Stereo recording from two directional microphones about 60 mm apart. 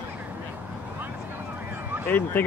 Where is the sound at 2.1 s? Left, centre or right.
Left.